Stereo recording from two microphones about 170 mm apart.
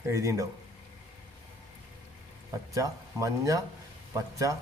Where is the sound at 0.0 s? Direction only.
15° right (ahead or behind).